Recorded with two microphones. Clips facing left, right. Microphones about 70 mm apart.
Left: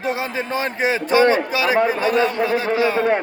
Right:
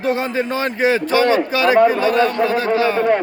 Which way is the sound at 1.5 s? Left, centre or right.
Centre.